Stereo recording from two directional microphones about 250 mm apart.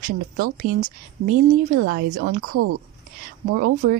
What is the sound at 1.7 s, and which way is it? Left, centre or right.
Speech, right.